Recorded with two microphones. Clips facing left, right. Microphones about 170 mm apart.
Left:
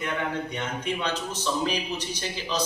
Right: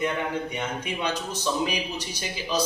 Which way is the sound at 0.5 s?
10° right (ahead or behind).